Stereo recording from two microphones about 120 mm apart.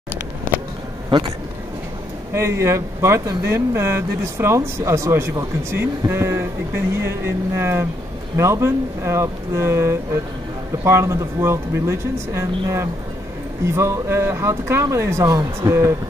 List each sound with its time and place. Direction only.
2.3 s speech: 25° right (ahead or behind)